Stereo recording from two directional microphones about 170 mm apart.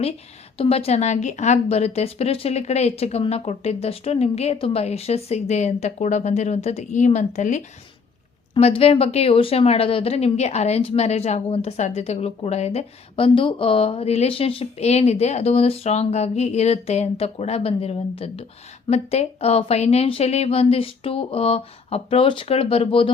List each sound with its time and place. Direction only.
0.5 s speech: 35° left (ahead or behind)